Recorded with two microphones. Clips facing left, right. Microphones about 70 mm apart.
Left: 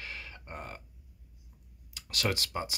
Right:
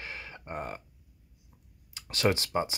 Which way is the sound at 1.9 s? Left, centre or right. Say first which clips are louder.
Right 5 dB; right.